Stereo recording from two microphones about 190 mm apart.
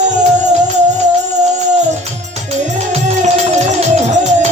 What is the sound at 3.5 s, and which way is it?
Music, 35° right (ahead or behind).